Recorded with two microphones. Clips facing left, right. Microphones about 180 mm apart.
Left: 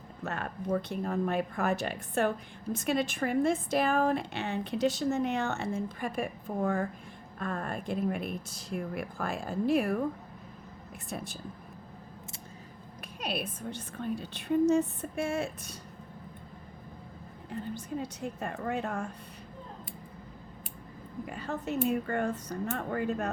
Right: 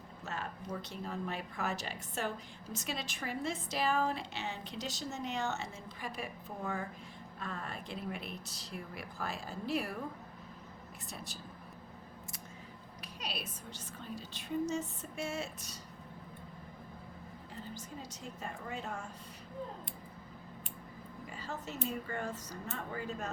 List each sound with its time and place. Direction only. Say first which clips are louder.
0.3 s a woman's voice: left 9 dB; 55° left (ahead or behind)
11.1 s a woman's voice: left 10 dB; 55° left (ahead or behind)
13.1 s a woman's voice: left 9 dB; 55° left (ahead or behind)
17.5 s a woman's voice: left 11 dB; 60° left (ahead or behind)
21.2 s a woman's voice: left 8 dB; 60° left (ahead or behind)